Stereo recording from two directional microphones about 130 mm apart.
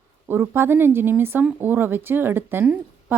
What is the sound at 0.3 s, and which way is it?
Speech, 15° right (ahead or behind).